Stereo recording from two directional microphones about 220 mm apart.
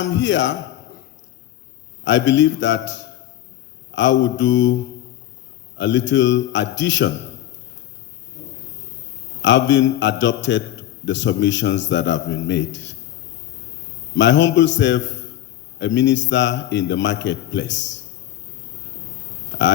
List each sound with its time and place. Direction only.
0.0 s a man's voice: 55° left (ahead or behind)
2.0 s a man's voice: 55° left (ahead or behind)
5.7 s a man's voice: 55° left (ahead or behind)
9.4 s a man's voice: 55° left (ahead or behind)
14.1 s a man's voice: 55° left (ahead or behind)
19.5 s a sound: 55° left (ahead or behind)